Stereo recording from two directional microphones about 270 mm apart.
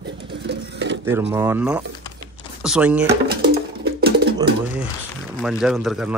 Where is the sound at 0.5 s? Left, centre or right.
Right.